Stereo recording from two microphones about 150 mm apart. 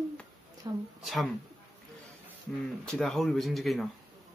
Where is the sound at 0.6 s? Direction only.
30° right (ahead or behind).